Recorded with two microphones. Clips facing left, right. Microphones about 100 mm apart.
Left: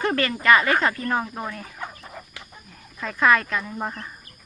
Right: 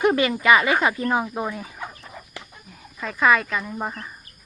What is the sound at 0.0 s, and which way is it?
Speech, 15° right (ahead or behind).